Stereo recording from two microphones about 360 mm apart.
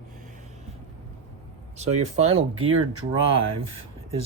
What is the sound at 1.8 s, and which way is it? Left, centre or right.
Speech, right.